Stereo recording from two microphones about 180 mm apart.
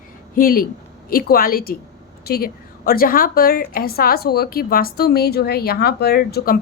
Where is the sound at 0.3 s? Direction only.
55° left (ahead or behind).